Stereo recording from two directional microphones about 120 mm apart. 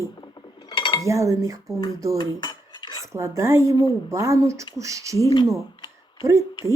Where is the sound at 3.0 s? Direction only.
25° right (ahead or behind).